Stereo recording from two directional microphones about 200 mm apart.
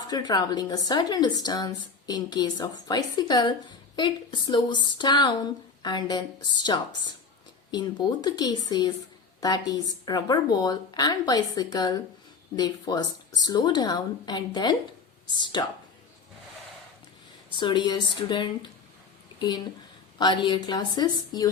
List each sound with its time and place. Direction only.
0.1 s a woman's voice: 20° left (ahead or behind)
17.6 s a woman's voice: 25° left (ahead or behind)